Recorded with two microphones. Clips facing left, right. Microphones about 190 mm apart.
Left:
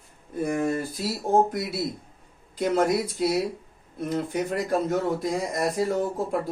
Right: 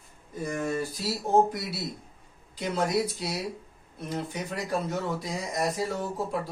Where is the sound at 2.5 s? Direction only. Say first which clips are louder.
Left 8 dB; 50° left (ahead or behind).